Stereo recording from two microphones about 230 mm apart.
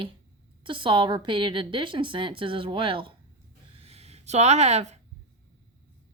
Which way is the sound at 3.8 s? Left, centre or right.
Right.